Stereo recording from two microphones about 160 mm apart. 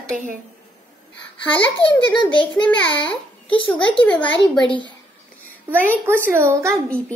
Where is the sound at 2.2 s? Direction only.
30° left (ahead or behind).